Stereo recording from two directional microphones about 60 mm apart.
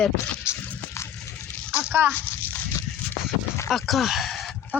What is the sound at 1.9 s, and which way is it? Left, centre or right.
Speech, right.